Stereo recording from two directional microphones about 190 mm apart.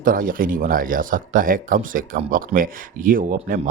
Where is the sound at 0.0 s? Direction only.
45° right (ahead or behind).